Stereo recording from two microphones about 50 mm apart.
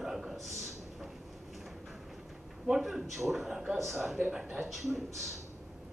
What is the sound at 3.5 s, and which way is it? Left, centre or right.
Speech, centre.